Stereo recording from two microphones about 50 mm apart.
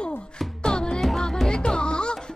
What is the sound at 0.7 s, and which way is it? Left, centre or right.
Music, centre.